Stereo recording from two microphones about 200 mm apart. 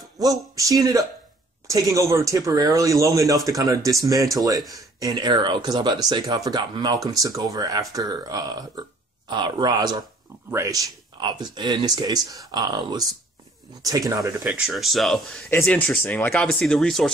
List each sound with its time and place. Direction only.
0.2 s speech: 15° right (ahead or behind)
14.4 s speech: 5° right (ahead or behind)